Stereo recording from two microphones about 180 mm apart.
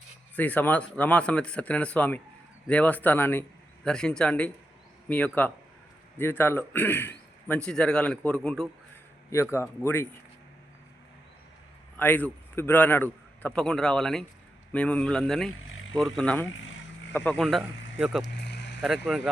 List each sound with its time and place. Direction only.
0.3 s a man's voice: 10° left (ahead or behind)
9.3 s a man's voice: 15° left (ahead or behind)
11.9 s a man's voice: 10° left (ahead or behind)
18.4 s vehicle: 70° left (ahead or behind)
18.8 s speech: centre (ahead or behind)